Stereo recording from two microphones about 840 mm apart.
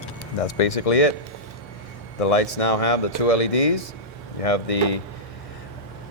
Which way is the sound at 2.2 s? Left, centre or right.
Left.